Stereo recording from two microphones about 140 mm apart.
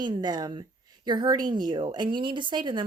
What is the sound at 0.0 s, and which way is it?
A woman's voice, 30° right (ahead or behind).